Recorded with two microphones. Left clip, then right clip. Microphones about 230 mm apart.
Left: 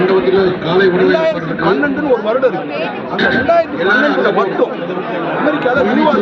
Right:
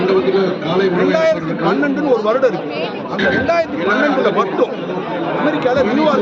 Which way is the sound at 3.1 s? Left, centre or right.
Left.